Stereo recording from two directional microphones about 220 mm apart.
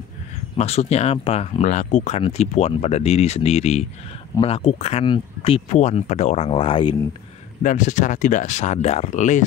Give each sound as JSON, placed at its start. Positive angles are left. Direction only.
{"t": 0.6, "sound": "speech", "side_deg": 30}
{"t": 7.6, "sound": "speech", "side_deg": 35}